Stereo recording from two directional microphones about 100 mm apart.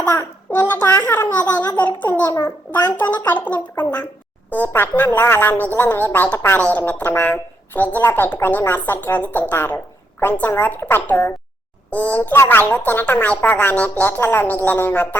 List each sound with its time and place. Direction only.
0.0 s a woman's voice: 20° left (ahead or behind)
2.3 s a child's voice: 40° left (ahead or behind)
3.0 s a child's voice: 20° left (ahead or behind)